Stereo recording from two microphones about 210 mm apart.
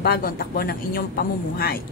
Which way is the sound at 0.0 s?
45° left (ahead or behind).